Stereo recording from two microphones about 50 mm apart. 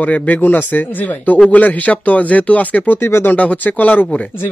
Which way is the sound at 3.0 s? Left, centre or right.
Left.